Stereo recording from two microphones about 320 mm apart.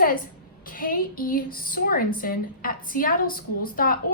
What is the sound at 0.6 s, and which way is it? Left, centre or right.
A woman's voice, left.